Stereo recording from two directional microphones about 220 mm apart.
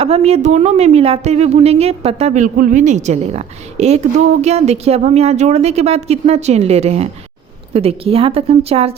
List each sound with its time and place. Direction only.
0.0 s a woman's voice: 30° right (ahead or behind)